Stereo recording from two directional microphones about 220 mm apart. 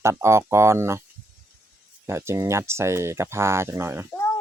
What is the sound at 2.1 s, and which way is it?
Speech, 10° right (ahead or behind).